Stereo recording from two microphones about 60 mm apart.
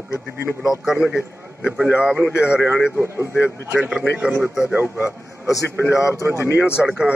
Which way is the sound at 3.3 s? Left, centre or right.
Right.